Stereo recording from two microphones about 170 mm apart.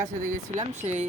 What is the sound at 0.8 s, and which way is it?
Speech, 40° right (ahead or behind).